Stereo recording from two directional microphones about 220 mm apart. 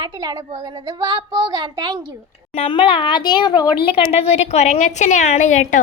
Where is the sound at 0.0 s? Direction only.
20° right (ahead or behind).